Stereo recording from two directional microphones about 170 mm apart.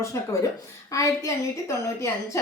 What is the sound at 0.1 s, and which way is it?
A woman's voice, 20° left (ahead or behind).